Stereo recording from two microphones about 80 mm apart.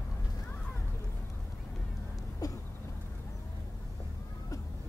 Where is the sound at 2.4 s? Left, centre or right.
Left.